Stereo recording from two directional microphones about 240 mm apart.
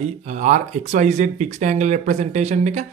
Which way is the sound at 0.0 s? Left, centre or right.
Right.